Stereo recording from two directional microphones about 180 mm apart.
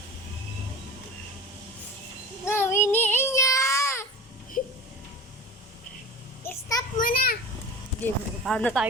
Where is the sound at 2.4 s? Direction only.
15° left (ahead or behind).